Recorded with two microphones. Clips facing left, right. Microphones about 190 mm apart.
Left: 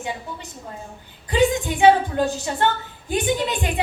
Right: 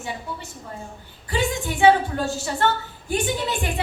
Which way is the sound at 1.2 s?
20° left (ahead or behind).